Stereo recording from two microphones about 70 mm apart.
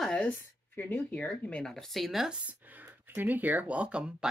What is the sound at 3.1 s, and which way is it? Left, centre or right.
Speech, right.